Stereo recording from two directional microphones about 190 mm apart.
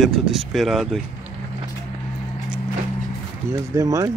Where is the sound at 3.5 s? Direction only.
15° right (ahead or behind).